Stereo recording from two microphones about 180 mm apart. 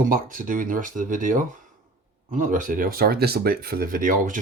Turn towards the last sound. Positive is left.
turn(degrees=-45)  # may be behind; listen again after turning